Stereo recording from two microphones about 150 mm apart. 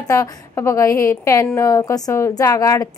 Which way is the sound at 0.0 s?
20° left (ahead or behind).